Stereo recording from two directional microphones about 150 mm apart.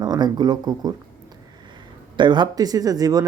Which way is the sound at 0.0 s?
25° right (ahead or behind).